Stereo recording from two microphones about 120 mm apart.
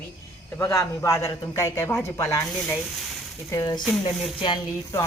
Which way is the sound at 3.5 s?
30° left (ahead or behind).